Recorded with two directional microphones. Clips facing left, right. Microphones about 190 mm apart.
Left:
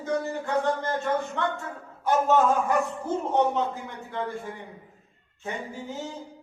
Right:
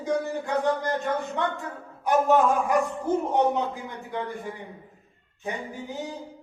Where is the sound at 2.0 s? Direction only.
15° right (ahead or behind).